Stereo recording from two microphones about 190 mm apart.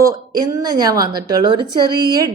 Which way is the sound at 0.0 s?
20° right (ahead or behind).